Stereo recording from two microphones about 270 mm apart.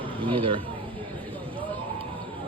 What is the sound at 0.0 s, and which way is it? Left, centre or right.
Speech, centre.